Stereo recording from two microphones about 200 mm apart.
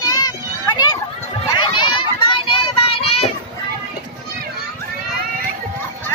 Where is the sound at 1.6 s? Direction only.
25° left (ahead or behind).